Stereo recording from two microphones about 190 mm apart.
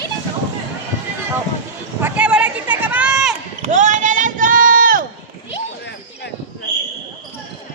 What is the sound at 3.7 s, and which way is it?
Run, 40° right (ahead or behind).